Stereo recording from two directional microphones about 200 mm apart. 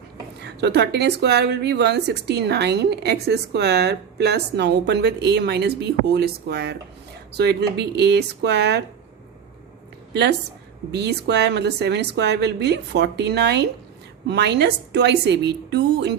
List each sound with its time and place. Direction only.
0.4 s speech: 55° right (ahead or behind)
10.9 s speech: 55° right (ahead or behind)